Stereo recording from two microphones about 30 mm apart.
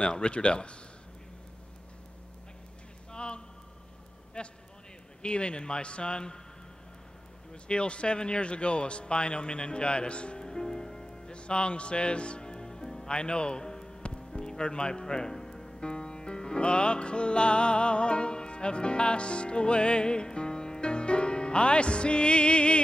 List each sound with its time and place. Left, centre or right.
0.0 s a man's voice: left
3.1 s a sound: left
4.4 s a man's voice: left
7.6 s a man's voice: left
10.4 s music: centre
11.3 s music: left
13.1 s speech: left
14.0 s music: left
14.6 s a man's voice: left
15.8 s music: left